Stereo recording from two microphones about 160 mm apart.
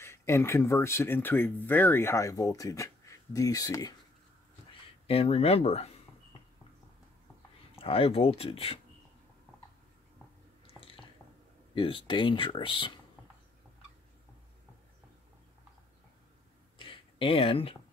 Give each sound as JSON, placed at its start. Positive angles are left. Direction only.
{"t": 0.0, "sound": "speech", "side_deg": 15}
{"t": 5.0, "sound": "speech", "side_deg": 35}
{"t": 7.7, "sound": "speech", "side_deg": 35}
{"t": 10.8, "sound": "squish", "side_deg": 35}
{"t": 11.7, "sound": "speech", "side_deg": 30}
{"t": 16.7, "sound": "a sound", "side_deg": 35}